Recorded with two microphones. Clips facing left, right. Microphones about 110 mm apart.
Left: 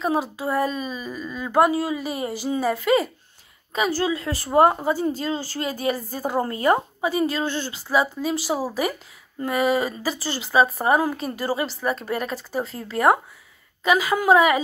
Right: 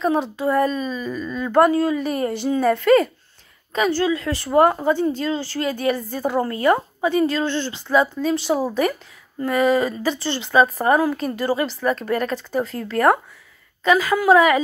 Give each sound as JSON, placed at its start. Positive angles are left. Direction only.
{"t": 0.0, "sound": "speech", "side_deg": 5}
{"t": 4.0, "sound": "a woman's voice", "side_deg": 25}
{"t": 5.6, "sound": "speech", "side_deg": 20}